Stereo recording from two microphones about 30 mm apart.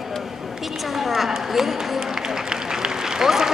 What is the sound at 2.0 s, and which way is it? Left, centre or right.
Applause, centre.